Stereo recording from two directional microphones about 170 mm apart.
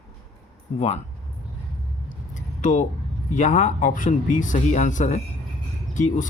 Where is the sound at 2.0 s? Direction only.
45° left (ahead or behind).